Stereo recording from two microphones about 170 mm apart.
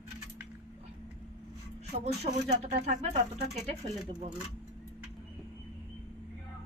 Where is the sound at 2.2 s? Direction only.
40° right (ahead or behind).